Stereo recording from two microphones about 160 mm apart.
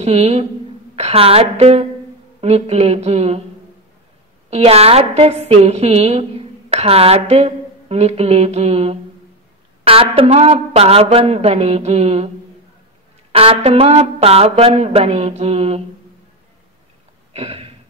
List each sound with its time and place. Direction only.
0.0 s a woman's voice: 40° right (ahead or behind)
4.5 s a woman's voice: 40° right (ahead or behind)
13.3 s a woman's voice: 35° right (ahead or behind)
17.3 s a sound: 40° right (ahead or behind)